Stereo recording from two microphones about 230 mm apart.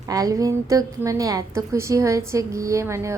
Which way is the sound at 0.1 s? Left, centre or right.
Centre.